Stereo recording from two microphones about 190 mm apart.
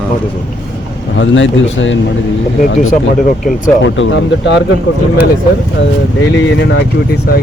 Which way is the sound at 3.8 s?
75° left (ahead or behind).